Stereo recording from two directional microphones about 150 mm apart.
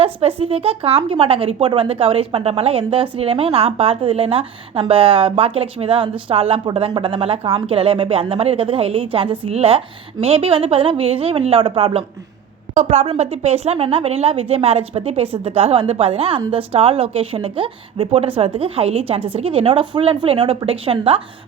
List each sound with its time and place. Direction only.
0.0 s a woman's voice: 40° right (ahead or behind)
12.7 s a woman's voice: 50° right (ahead or behind)